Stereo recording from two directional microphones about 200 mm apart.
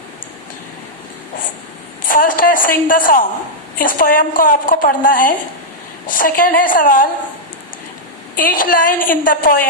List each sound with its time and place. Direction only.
2.0 s a woman's voice: 45° left (ahead or behind)
8.4 s a woman's voice: 45° left (ahead or behind)